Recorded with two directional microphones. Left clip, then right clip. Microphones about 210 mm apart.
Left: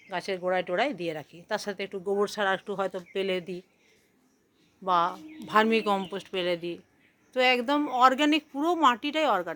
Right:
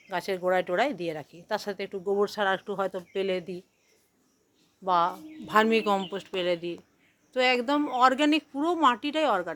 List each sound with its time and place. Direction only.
0.1 s speech: 5° right (ahead or behind)
4.8 s speech: 5° left (ahead or behind)